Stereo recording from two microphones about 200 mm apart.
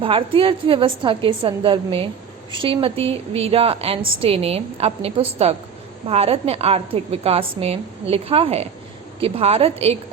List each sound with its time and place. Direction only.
0.0 s a woman's voice: 25° right (ahead or behind)